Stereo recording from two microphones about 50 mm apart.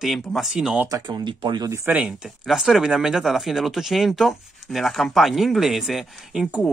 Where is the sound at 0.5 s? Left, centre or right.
Centre.